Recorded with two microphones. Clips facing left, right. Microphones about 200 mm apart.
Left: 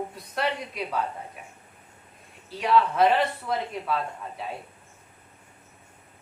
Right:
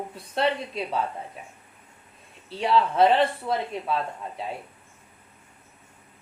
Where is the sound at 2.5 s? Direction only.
30° right (ahead or behind).